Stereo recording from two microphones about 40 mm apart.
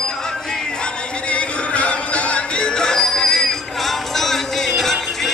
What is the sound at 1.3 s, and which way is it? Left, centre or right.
Music, left.